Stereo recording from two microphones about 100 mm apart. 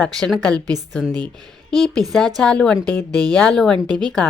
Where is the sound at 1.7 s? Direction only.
5° left (ahead or behind).